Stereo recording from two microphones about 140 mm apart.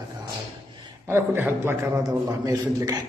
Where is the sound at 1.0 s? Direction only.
15° right (ahead or behind).